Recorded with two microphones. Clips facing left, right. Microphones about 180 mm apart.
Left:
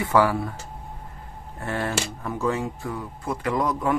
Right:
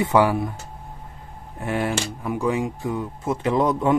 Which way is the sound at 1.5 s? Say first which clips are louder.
Right 3 dB; 15° right (ahead or behind).